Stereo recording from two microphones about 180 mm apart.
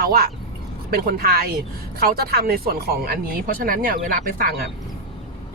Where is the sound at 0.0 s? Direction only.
55° right (ahead or behind).